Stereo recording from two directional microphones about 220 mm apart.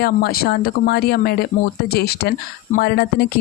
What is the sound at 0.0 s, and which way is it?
Speech, 45° left (ahead or behind).